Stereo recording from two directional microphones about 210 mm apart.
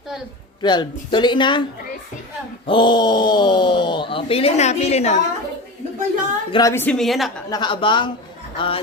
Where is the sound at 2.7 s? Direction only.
25° left (ahead or behind).